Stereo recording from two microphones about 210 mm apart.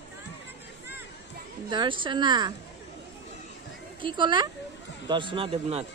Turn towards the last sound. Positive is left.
turn(degrees=-25)  # may be behind; listen again after turning